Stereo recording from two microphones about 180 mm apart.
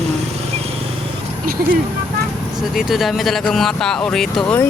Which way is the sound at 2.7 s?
Centre (ahead or behind).